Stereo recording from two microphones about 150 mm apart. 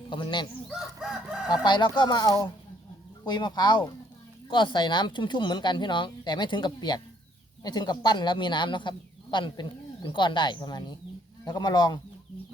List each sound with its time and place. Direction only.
0.1 s speech: 30° left (ahead or behind)
1.5 s speech: 30° left (ahead or behind)